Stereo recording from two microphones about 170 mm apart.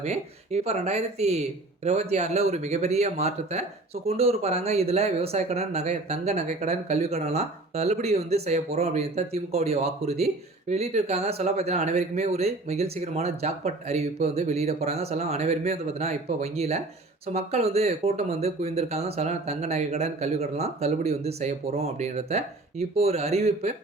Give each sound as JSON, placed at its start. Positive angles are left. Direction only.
{"t": 0.0, "sound": "speech", "side_deg": -40}